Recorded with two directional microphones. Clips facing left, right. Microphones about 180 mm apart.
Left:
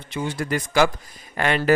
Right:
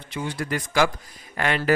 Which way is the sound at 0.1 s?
25° left (ahead or behind).